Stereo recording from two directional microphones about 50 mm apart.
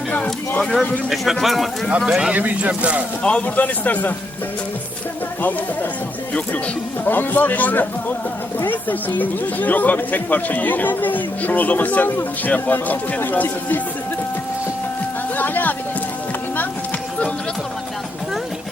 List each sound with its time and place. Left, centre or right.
0.6 s speech: centre
2.0 s speech: centre
2.3 s speech: right
3.4 s speech: left
5.4 s speech: left
7.0 s speech: left
15.4 s a sound: left